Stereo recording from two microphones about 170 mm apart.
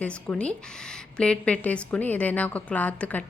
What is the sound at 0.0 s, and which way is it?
A woman's voice, 5° left (ahead or behind).